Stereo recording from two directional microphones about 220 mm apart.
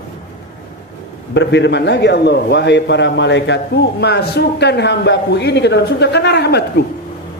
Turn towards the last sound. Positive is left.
turn(degrees=50)  # may be behind; listen again after turning